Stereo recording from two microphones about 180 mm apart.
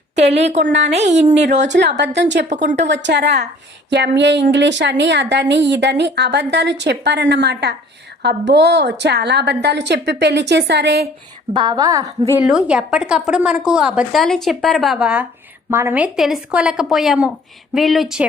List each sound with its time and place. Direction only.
0.2 s a woman's voice: 35° right (ahead or behind)
2.9 s a woman's voice: 75° right (ahead or behind)
11.5 s a woman's voice: 25° right (ahead or behind)
12.5 s a woman's voice: 5° right (ahead or behind)